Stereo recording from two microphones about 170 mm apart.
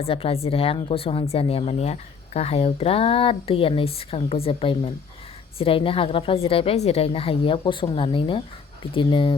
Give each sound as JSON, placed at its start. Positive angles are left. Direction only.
{"t": 0.0, "sound": "a woman's voice", "side_deg": 35}